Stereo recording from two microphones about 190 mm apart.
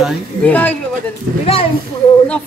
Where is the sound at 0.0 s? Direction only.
5° left (ahead or behind).